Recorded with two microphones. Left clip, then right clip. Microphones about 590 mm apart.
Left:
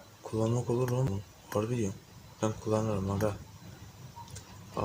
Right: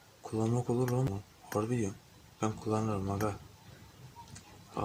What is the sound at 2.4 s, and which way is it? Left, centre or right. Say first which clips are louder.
Speech: left 3 dB; right.